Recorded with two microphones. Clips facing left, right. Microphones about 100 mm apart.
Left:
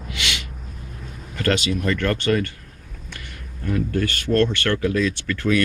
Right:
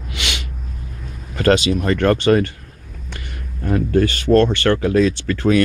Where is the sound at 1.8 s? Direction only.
35° right (ahead or behind).